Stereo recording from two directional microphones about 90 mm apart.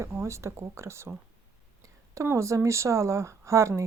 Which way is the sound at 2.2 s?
35° right (ahead or behind).